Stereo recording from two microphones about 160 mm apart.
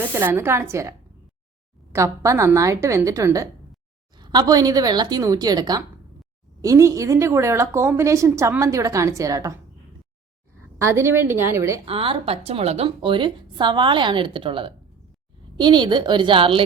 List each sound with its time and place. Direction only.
0.1 s a woman's voice: 15° right (ahead or behind)
10.8 s a woman's voice: 15° right (ahead or behind)
11.9 s a woman's voice: 35° right (ahead or behind)